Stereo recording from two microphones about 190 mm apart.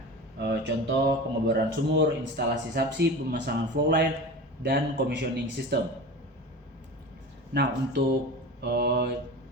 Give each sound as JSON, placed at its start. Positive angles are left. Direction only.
{"t": 0.3, "sound": "speech", "side_deg": -60}
{"t": 7.5, "sound": "speech", "side_deg": -60}